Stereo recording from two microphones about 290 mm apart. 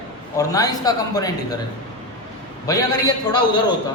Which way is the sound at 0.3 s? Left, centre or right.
Centre.